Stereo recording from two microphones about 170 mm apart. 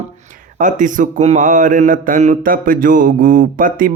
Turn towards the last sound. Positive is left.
turn(degrees=-55)  # may be behind; listen again after turning